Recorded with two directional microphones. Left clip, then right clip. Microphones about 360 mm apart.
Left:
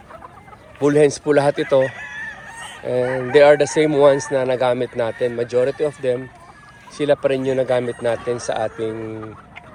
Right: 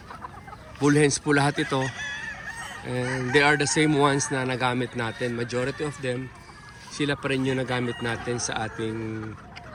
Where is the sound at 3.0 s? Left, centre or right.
Centre.